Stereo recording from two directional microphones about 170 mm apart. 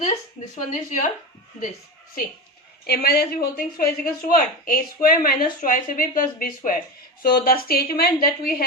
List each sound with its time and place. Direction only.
0.0 s speech: 45° left (ahead or behind)
2.8 s speech: 65° left (ahead or behind)